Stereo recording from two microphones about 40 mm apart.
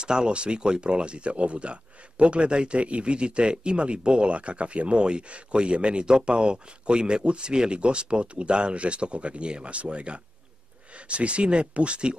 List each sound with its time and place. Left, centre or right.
0.0 s speech: right